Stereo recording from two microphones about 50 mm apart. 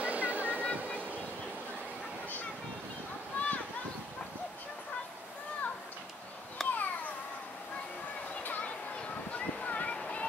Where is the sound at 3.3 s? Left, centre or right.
Left.